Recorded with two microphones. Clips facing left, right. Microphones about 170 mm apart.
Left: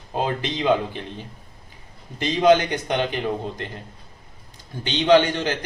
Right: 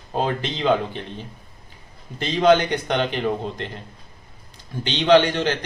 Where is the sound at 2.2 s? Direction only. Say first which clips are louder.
Even; 10° left (ahead or behind).